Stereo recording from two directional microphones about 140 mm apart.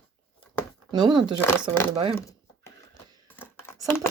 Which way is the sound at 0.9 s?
30° right (ahead or behind).